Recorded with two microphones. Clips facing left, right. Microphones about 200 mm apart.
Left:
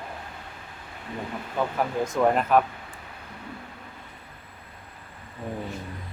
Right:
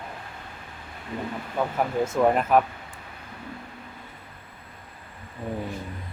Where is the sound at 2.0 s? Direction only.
5° right (ahead or behind).